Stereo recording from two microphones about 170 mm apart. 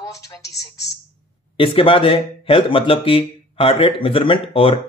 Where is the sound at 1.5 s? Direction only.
30° left (ahead or behind).